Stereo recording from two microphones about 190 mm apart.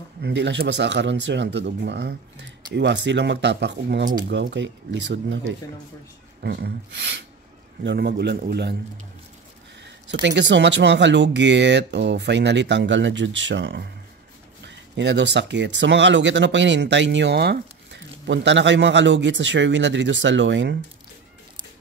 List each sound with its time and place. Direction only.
0.2 s speech: 70° right (ahead or behind)
6.4 s speech: 60° right (ahead or behind)
10.2 s speech: 65° right (ahead or behind)